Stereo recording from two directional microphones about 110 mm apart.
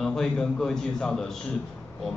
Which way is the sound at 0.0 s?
5° left (ahead or behind).